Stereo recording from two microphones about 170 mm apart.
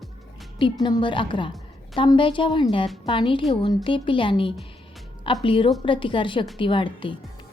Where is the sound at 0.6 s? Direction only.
25° left (ahead or behind).